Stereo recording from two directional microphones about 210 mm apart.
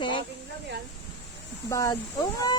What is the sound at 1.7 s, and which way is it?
Speech, 15° left (ahead or behind).